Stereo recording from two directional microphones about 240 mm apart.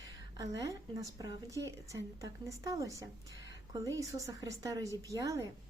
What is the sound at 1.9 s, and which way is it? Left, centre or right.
A woman's voice, centre.